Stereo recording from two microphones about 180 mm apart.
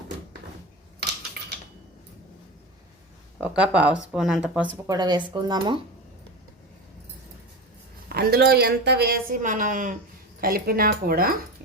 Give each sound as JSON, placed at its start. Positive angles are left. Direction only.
{"t": 0.9, "sound": "typing", "side_deg": -65}
{"t": 3.4, "sound": "speech", "side_deg": -5}
{"t": 4.9, "sound": "speech", "side_deg": -25}
{"t": 8.1, "sound": "speech", "side_deg": -60}